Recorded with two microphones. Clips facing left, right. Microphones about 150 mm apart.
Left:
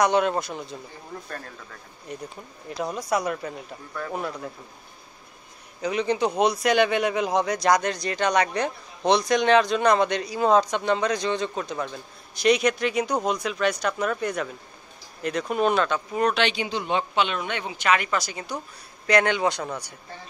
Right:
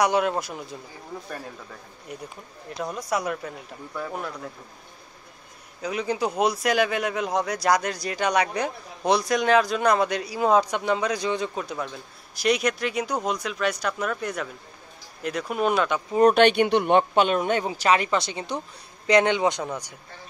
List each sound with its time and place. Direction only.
0.0 s speech: 5° right (ahead or behind)
2.7 s a man's voice: centre (ahead or behind)
5.8 s a man's voice: centre (ahead or behind)
16.2 s a man's voice: 45° right (ahead or behind); by 19.9 s 15° right (ahead or behind)